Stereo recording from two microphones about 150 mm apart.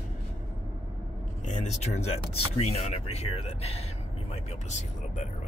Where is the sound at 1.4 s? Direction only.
50° left (ahead or behind).